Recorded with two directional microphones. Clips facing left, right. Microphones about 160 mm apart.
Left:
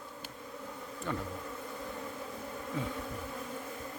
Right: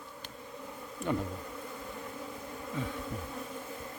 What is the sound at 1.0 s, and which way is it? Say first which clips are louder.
Bee: right 5 dB; 15° right (ahead or behind).